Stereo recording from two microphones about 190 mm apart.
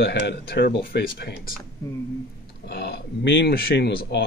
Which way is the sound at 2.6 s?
60° left (ahead or behind).